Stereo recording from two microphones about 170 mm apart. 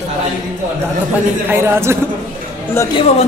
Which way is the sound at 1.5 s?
15° right (ahead or behind).